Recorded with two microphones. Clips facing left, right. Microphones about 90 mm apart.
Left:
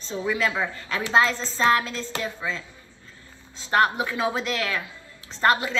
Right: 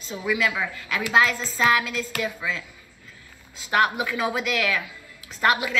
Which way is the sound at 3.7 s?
35° left (ahead or behind).